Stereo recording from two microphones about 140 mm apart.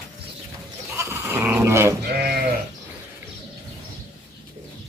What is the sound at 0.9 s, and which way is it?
Goat, 20° right (ahead or behind).